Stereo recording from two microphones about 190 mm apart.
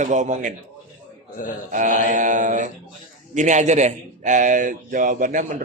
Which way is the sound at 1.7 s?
45° right (ahead or behind).